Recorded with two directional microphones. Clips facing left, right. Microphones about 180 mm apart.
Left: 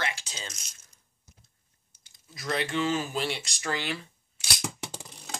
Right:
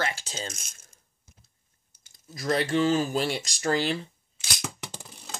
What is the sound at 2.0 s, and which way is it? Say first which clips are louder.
Speech: right 6 dB; 45° right (ahead or behind).